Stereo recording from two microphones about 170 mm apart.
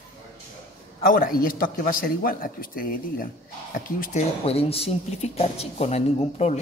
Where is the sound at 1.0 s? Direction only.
60° left (ahead or behind).